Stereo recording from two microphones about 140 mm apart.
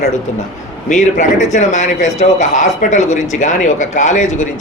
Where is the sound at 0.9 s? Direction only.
65° left (ahead or behind).